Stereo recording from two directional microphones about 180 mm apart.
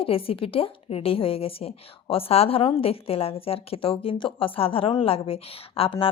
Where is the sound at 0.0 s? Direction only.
30° left (ahead or behind).